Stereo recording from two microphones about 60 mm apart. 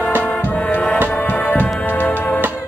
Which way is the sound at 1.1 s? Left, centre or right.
Left.